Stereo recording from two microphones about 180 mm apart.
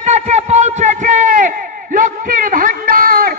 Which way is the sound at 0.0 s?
40° right (ahead or behind).